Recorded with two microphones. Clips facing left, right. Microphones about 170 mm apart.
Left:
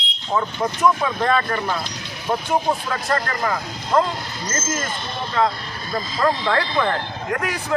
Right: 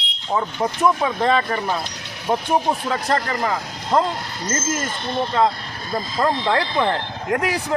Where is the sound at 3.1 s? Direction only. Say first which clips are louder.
Right 1 dB; 25° right (ahead or behind).